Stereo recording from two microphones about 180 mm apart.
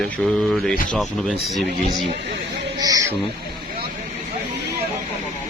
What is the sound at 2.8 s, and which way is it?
Speech, 20° right (ahead or behind).